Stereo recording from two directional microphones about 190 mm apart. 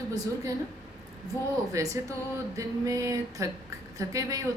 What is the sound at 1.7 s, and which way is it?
A woman's voice, 15° right (ahead or behind).